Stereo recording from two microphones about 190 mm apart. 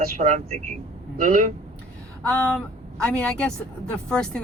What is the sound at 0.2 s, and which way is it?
Speech, 35° right (ahead or behind).